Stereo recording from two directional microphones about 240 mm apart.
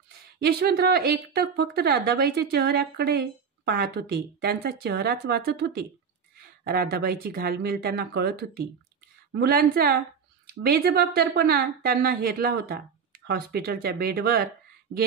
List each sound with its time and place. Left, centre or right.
0.4 s speech: right